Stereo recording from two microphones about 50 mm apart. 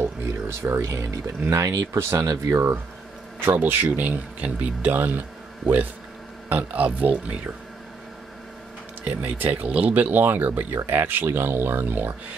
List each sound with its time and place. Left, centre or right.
0.0 s speech: right
3.4 s speech: right
6.5 s speech: right
9.0 s speech: right